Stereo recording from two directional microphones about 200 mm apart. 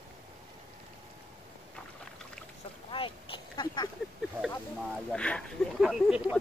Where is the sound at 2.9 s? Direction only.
25° left (ahead or behind).